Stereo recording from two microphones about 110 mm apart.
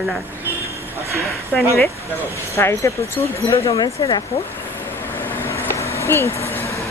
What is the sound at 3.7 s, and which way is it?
Speech, 40° left (ahead or behind).